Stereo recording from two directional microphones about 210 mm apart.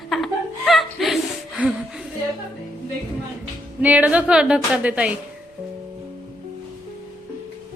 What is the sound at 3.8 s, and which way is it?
A woman's voice, 5° right (ahead or behind).